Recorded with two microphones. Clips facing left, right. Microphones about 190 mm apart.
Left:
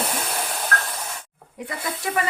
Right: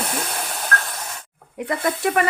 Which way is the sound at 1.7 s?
60° right (ahead or behind).